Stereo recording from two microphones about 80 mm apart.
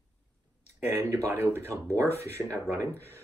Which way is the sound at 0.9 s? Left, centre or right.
Right.